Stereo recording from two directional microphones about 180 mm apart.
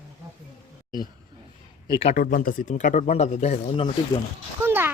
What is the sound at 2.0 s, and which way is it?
Speech, 35° left (ahead or behind).